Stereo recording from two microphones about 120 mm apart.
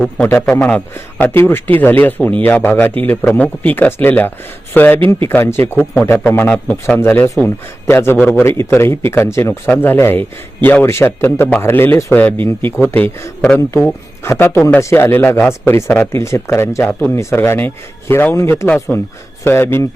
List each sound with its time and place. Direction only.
0.6 s speech: 15° left (ahead or behind)
4.9 s speech: 45° right (ahead or behind)
5.3 s speech: 20° left (ahead or behind)